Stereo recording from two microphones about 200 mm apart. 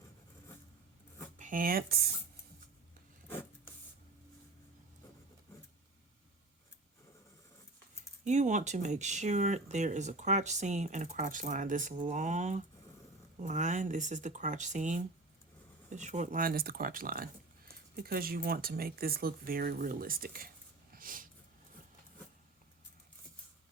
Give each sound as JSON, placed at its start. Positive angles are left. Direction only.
{"t": 1.4, "sound": "speech", "side_deg": -40}
{"t": 8.2, "sound": "speech", "side_deg": -35}
{"t": 20.9, "sound": "a sound", "side_deg": -45}